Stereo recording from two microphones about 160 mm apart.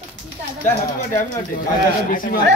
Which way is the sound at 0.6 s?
55° left (ahead or behind).